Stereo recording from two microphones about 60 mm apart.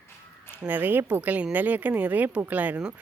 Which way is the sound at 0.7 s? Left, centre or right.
Right.